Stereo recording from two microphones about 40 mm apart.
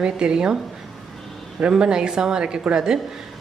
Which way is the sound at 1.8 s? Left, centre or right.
Centre.